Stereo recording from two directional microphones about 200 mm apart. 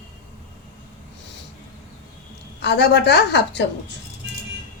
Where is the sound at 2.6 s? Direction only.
60° left (ahead or behind).